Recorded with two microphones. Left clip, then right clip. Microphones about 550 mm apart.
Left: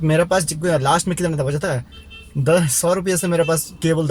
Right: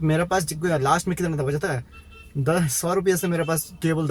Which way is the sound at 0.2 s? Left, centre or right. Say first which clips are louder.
Left 6 dB; right.